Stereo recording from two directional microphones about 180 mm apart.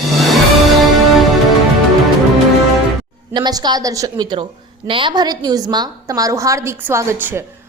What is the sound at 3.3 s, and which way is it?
A woman's voice, 25° right (ahead or behind).